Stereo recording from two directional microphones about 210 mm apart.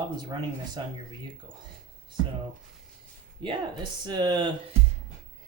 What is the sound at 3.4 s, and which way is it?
Speech, 20° right (ahead or behind).